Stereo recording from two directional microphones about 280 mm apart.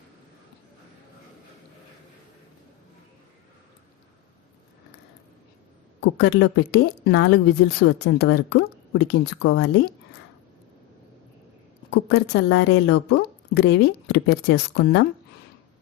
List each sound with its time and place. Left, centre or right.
6.0 s a woman's voice: left
11.9 s a woman's voice: left